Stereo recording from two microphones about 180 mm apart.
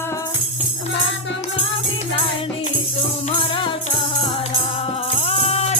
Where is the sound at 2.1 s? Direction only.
30° left (ahead or behind).